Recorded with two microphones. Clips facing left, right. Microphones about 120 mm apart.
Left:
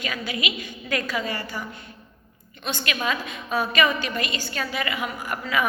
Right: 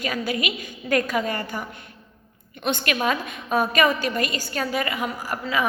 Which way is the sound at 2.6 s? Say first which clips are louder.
Right 4 dB; 50° right (ahead or behind).